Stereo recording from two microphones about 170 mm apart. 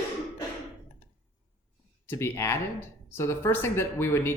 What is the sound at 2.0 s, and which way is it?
Speech, 15° left (ahead or behind).